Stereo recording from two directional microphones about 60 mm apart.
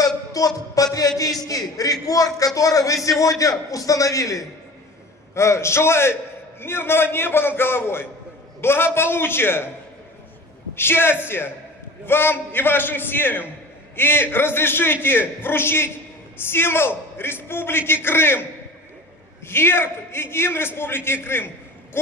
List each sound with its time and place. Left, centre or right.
0.0 s a sound: left
0.7 s a man's voice: left
5.3 s a man's voice: left
10.7 s a man's voice: left